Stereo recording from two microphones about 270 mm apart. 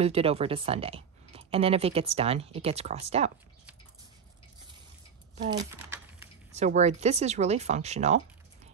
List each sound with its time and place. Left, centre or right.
0.0 s speech: right
5.6 s speech: centre
6.5 s speech: right